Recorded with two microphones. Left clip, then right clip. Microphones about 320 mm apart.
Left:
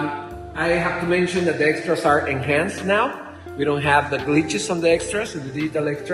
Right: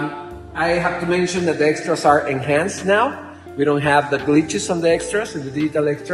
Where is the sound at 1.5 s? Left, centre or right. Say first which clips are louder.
Right 2 dB; right.